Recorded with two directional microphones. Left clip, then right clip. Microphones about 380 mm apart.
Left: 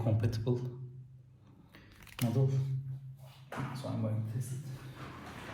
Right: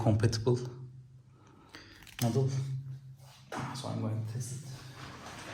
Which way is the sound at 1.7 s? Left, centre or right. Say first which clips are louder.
Right 5 dB; right.